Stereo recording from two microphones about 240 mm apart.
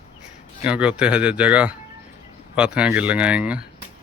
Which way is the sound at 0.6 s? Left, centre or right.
Centre.